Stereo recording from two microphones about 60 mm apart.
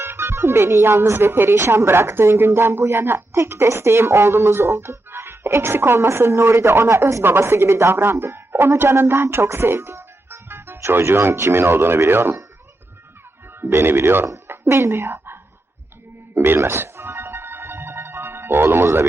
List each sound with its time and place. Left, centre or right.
0.0 s speech: right
13.6 s speech: right
16.3 s music: right